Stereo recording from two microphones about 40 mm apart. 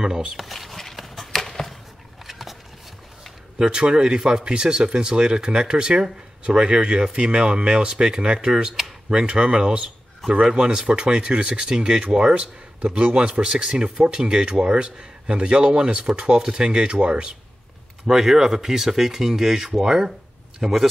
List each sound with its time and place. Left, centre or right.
0.4 s a sound: centre
3.5 s a man's voice: right
18.0 s speech: centre